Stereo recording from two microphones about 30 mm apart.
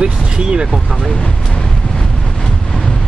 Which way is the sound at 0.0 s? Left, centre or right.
Right.